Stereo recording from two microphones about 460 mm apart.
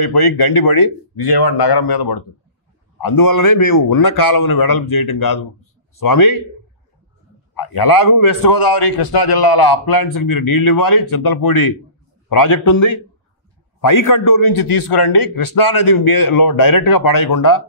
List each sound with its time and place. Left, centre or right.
0.0 s speech: left
1.4 s a man's voice: left
5.9 s a man's voice: left
7.5 s a man's voice: left